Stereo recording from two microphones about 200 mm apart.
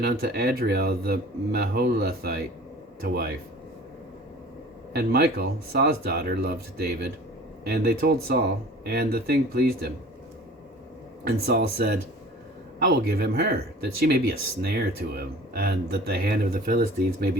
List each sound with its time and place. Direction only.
0.0 s speech: 55° right (ahead or behind)
4.9 s speech: 50° right (ahead or behind)
11.3 s speech: 50° right (ahead or behind)
14.6 s speech: 55° right (ahead or behind)